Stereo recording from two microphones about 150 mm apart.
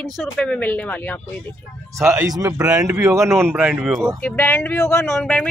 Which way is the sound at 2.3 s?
20° right (ahead or behind).